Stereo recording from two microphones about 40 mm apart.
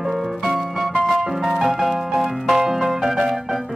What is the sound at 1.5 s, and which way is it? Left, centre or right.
Music, centre.